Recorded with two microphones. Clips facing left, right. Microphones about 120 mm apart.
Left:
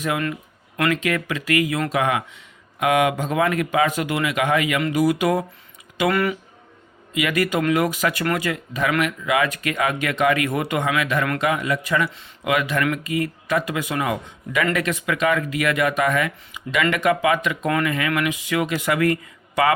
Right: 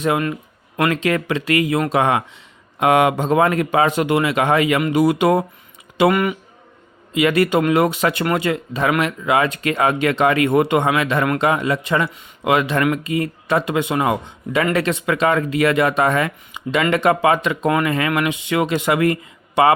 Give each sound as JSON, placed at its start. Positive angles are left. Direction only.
{"t": 0.0, "sound": "speech", "side_deg": -25}
{"t": 7.1, "sound": "speech", "side_deg": -30}